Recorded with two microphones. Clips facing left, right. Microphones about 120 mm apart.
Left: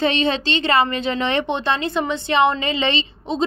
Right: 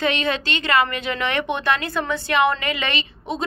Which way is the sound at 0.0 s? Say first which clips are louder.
Left 3 dB; 30° left (ahead or behind).